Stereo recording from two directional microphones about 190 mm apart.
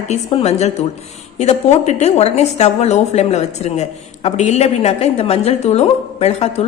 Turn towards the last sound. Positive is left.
turn(degrees=35)  # may be behind; listen again after turning